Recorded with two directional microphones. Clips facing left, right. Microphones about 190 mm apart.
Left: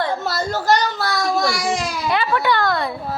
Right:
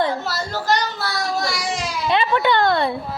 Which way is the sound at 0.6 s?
45° left (ahead or behind).